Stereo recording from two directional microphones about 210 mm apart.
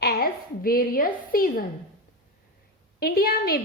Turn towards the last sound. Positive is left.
turn(degrees=45)  # may be behind; listen again after turning